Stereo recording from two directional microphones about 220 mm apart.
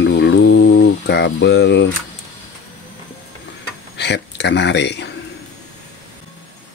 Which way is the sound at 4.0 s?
50° left (ahead or behind).